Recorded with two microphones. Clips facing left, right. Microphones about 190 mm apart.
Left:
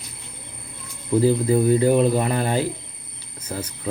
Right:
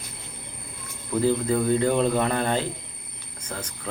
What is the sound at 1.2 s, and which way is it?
Speech, 10° left (ahead or behind).